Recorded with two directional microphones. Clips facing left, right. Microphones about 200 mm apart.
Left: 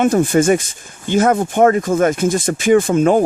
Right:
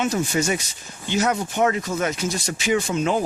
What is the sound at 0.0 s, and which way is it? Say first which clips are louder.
Speech: left 9 dB; 50° left (ahead or behind).